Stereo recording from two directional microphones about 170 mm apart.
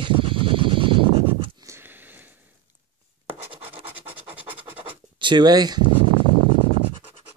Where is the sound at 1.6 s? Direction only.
15° right (ahead or behind).